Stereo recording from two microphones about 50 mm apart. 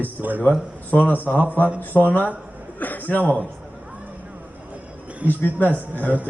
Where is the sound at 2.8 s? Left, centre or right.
Left.